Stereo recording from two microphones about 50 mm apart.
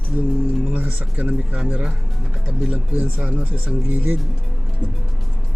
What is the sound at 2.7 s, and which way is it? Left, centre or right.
Speech, right.